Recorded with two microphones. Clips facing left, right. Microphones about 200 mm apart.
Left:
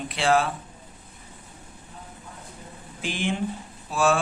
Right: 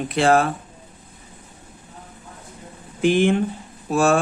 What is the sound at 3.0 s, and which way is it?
Speech, 55° right (ahead or behind).